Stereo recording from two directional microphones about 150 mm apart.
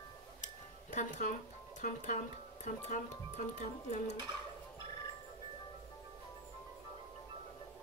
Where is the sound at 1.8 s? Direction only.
60° left (ahead or behind).